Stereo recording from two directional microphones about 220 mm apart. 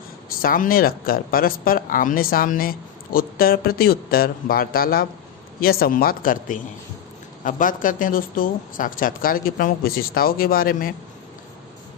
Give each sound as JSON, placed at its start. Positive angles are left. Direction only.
{"t": 0.4, "sound": "speech", "side_deg": 40}